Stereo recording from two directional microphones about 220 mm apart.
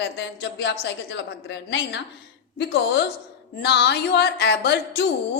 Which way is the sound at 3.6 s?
50° left (ahead or behind).